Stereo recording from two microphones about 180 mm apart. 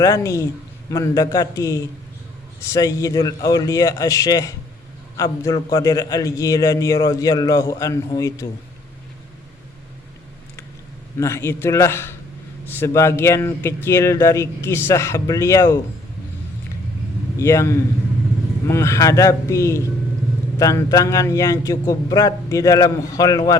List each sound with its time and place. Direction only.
0.0 s a man's voice: 15° left (ahead or behind)
11.2 s speech: 15° left (ahead or behind)
17.3 s a man's voice: 15° left (ahead or behind)